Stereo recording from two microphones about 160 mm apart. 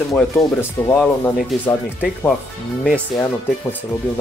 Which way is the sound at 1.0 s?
Centre (ahead or behind).